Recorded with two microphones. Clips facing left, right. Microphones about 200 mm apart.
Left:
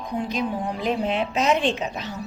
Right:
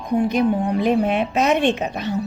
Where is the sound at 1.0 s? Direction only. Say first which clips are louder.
Right 4 dB; 60° right (ahead or behind).